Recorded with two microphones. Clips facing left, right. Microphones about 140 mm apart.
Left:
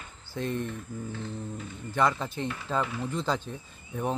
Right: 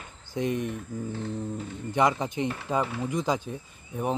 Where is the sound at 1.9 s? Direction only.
20° right (ahead or behind).